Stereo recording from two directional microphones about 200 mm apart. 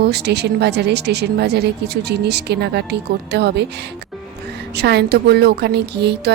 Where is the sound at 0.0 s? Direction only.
55° right (ahead or behind).